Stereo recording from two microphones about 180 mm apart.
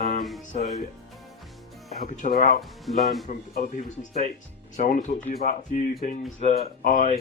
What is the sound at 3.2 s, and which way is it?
Speech, 45° left (ahead or behind).